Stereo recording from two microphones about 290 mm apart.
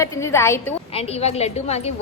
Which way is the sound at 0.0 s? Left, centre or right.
Centre.